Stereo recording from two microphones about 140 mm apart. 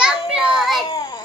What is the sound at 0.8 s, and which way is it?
Child singing, 30° left (ahead or behind).